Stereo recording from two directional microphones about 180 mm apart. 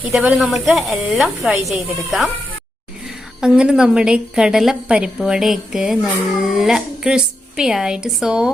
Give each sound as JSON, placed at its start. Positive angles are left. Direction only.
{"t": 0.0, "sound": "a woman's voice", "side_deg": -5}
{"t": 3.4, "sound": "a woman's voice", "side_deg": -5}